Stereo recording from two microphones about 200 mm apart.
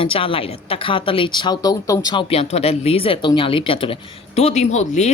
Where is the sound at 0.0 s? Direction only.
25° left (ahead or behind).